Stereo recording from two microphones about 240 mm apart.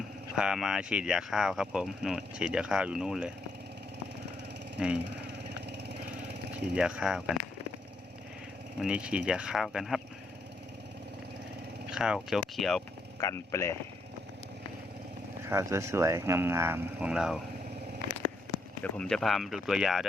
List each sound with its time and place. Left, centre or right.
0.3 s speech: centre
6.5 s speech: centre
8.8 s speech: centre
11.9 s speech: centre
13.1 s speech: centre
15.4 s speech: centre
18.8 s speech: centre